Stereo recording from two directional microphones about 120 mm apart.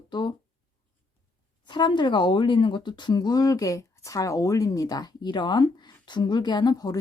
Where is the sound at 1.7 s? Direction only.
40° left (ahead or behind).